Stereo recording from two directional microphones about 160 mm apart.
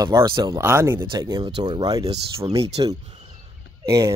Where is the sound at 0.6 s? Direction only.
15° right (ahead or behind).